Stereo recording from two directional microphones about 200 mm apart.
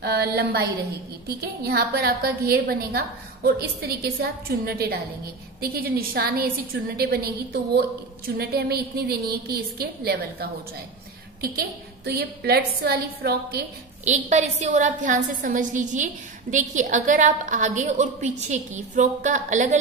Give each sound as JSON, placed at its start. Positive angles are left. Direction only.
{"t": 0.0, "sound": "a woman's voice", "side_deg": -50}
{"t": 14.0, "sound": "a woman's voice", "side_deg": -35}